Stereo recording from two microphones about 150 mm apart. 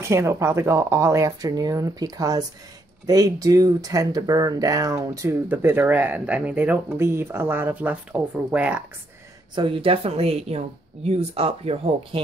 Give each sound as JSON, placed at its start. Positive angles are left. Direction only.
{"t": 0.0, "sound": "speech", "side_deg": -20}
{"t": 9.6, "sound": "speech", "side_deg": -35}